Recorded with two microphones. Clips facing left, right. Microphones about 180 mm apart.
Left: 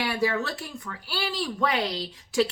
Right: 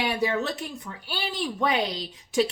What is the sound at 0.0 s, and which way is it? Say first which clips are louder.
Speech: right 1 dB; 20° right (ahead or behind).